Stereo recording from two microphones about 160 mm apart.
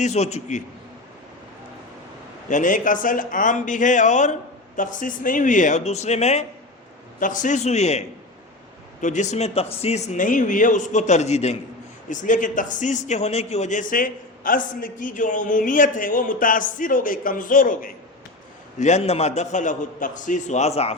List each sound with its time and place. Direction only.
0.0 s speech: 45° left (ahead or behind)
2.5 s speech: 55° left (ahead or behind)
7.2 s speech: 55° left (ahead or behind)
12.0 s a man's voice: 55° left (ahead or behind)
18.8 s speech: 45° left (ahead or behind)